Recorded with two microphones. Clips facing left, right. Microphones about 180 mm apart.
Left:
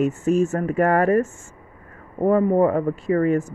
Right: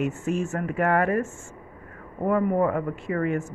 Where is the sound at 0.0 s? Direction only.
40° left (ahead or behind).